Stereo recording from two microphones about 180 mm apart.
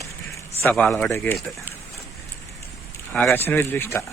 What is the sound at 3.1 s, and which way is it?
Speech, 10° left (ahead or behind).